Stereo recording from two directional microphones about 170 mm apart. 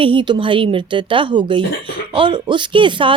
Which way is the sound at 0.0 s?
30° right (ahead or behind).